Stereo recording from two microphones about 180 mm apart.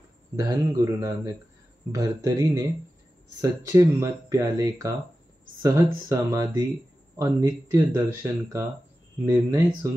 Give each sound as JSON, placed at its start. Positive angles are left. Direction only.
{"t": 0.4, "sound": "speech", "side_deg": -20}